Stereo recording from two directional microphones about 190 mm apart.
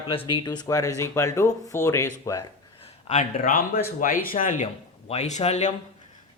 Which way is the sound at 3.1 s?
40° left (ahead or behind).